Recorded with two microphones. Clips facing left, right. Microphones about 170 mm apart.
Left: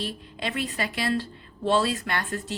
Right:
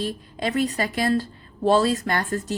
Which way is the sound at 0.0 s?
45° right (ahead or behind).